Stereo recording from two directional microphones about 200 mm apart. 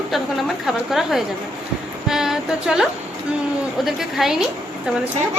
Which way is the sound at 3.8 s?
Centre (ahead or behind).